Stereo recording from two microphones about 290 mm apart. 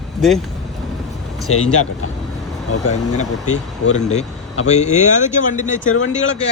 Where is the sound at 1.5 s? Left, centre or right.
Left.